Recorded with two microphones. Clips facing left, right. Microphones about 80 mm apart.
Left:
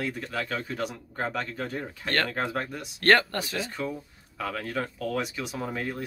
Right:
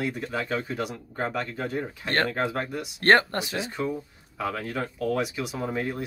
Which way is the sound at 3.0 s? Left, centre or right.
Right.